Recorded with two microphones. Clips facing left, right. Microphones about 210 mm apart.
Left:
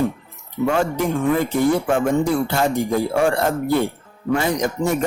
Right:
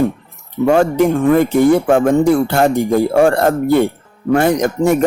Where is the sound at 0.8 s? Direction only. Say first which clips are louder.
Right 7 dB; 65° right (ahead or behind).